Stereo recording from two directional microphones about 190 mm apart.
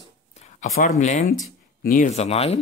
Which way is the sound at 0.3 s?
40° left (ahead or behind).